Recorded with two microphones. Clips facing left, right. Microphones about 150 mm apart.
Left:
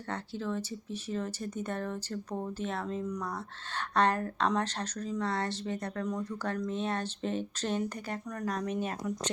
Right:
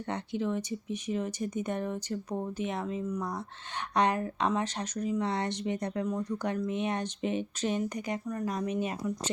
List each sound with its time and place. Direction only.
0.1 s speech: 15° right (ahead or behind)